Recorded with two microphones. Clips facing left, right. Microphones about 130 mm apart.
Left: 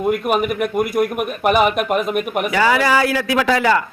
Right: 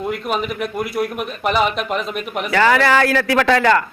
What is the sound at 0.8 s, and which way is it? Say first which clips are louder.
Speech: left 4 dB; 50° left (ahead or behind).